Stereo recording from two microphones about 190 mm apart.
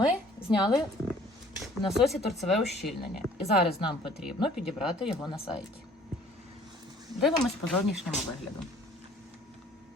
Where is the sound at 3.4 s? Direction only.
25° left (ahead or behind).